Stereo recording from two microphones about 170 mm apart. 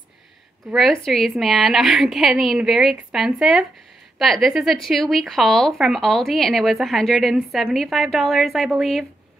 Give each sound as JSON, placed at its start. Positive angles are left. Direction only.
{"t": 0.7, "sound": "speech", "side_deg": 0}